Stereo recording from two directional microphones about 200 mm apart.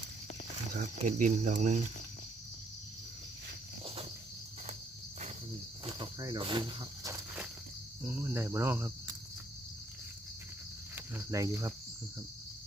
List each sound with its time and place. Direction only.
0.7 s speech: 40° right (ahead or behind)
5.8 s snake: 20° right (ahead or behind)
8.0 s speech: 10° right (ahead or behind)
10.9 s speech: 10° right (ahead or behind)